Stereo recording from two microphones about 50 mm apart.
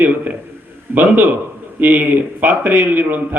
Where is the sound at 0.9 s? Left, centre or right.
Right.